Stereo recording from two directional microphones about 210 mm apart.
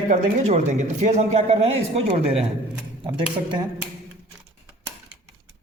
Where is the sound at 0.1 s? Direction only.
35° right (ahead or behind).